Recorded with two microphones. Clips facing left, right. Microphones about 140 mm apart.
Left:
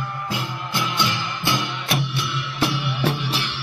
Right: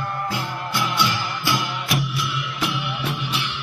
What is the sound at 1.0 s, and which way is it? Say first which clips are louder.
Music: right 1 dB; 25° left (ahead or behind).